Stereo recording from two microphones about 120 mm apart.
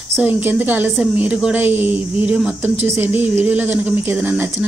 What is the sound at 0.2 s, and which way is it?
A woman's voice, 15° right (ahead or behind).